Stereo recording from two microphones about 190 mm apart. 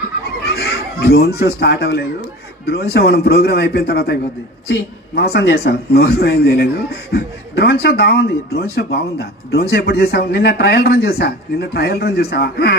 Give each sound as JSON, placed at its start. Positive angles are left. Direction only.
{"t": 1.0, "sound": "a man's voice", "side_deg": 55}